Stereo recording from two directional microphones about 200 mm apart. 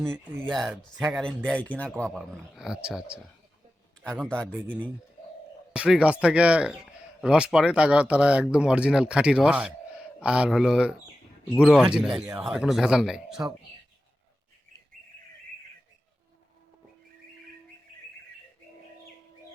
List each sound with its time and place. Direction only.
0.0 s speech: centre (ahead or behind)
5.7 s speech: 5° right (ahead or behind)